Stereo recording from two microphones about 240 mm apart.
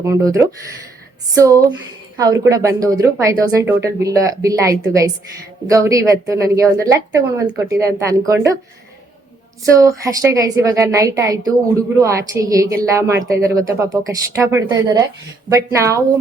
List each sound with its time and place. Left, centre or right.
0.0 s a woman's voice: centre
9.7 s a woman's voice: centre